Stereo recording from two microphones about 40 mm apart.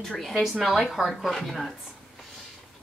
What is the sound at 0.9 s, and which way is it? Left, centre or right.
Speech, centre.